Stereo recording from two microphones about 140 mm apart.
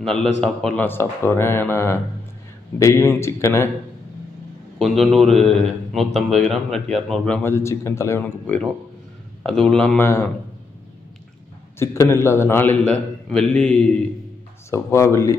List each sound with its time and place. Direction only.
0.4 s a man's voice: 5° left (ahead or behind)
4.7 s a man's voice: centre (ahead or behind)
7.4 s a man's voice: 20° left (ahead or behind)
8.2 s a man's voice: 10° left (ahead or behind)
11.8 s a man's voice: 20° left (ahead or behind)
14.7 s a man's voice: 20° left (ahead or behind)